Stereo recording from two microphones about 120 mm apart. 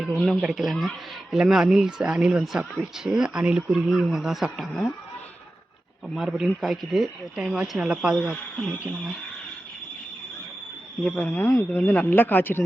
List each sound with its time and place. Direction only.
0.3 s speech: 5° right (ahead or behind)
6.1 s speech: 5° right (ahead or behind)
11.0 s speech: 10° left (ahead or behind)